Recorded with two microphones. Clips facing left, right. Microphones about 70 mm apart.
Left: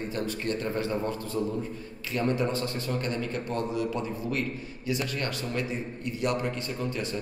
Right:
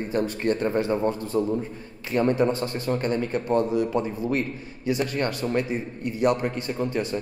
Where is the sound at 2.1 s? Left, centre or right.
Right.